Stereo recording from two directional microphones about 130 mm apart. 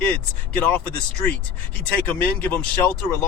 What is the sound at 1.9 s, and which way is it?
Speech, 15° left (ahead or behind).